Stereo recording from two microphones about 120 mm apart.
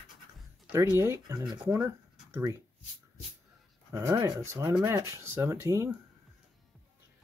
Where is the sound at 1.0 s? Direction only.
25° right (ahead or behind).